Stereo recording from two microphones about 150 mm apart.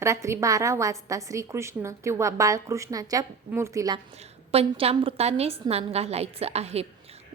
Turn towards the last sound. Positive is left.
turn(degrees=-45)  # may be behind; listen again after turning